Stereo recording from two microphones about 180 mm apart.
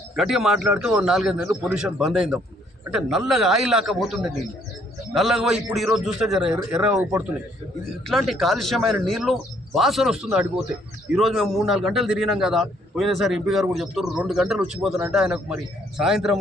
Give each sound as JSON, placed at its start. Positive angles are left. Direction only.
{"t": 0.2, "sound": "a man's voice", "side_deg": 0}